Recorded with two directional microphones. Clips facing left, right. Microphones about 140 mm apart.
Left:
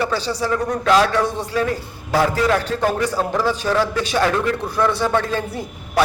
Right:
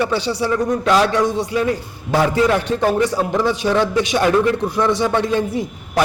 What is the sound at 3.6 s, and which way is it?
A man's voice, 20° right (ahead or behind).